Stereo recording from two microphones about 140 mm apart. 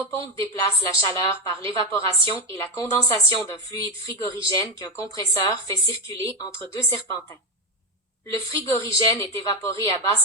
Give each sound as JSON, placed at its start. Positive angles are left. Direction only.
{"t": 0.1, "sound": "speech", "side_deg": 25}
{"t": 8.3, "sound": "speech", "side_deg": 20}